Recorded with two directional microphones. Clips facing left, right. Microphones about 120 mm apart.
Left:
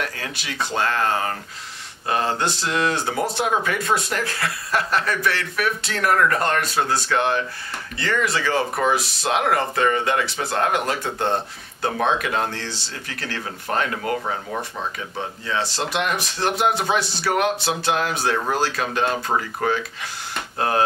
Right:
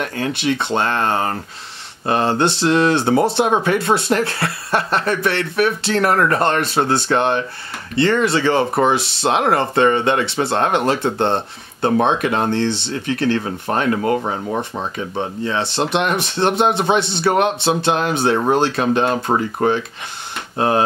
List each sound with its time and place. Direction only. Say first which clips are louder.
0.0 s speech: right 9 dB; 25° right (ahead or behind)